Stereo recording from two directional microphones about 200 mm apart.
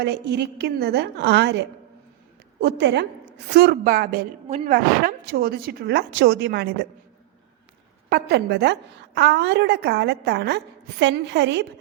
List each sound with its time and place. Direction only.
0.0 s a woman's voice: 55° right (ahead or behind)
8.1 s a woman's voice: 55° right (ahead or behind)